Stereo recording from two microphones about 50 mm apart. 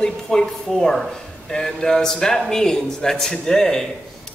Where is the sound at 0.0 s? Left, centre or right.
Centre.